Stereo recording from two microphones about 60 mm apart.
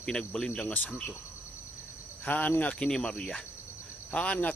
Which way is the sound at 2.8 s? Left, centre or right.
Centre.